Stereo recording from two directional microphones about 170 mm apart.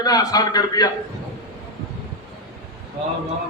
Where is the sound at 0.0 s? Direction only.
20° left (ahead or behind).